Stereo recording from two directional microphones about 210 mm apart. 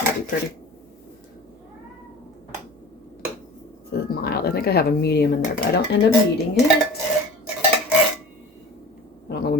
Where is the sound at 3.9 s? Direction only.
50° left (ahead or behind).